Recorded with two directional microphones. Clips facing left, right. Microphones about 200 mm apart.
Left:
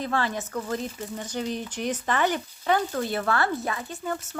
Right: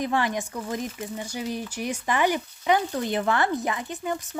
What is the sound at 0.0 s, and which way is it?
Speech, 15° right (ahead or behind).